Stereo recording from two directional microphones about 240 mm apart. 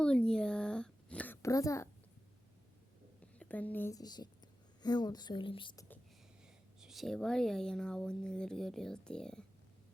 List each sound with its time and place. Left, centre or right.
0.0 s a sound: centre
3.3 s speech: centre
6.7 s speech: centre